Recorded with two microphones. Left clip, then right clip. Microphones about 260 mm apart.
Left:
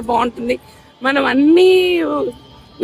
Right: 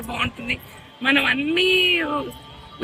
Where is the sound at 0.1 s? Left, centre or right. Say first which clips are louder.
Left 9 dB; centre.